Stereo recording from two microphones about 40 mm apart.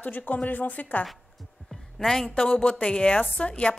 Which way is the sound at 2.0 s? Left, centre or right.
Centre.